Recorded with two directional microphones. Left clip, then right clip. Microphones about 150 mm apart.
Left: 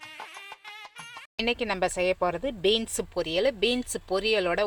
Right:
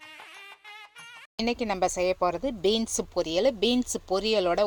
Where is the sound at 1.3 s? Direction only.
35° right (ahead or behind).